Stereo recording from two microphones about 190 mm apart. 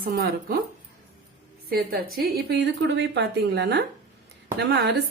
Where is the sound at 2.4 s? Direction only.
65° right (ahead or behind).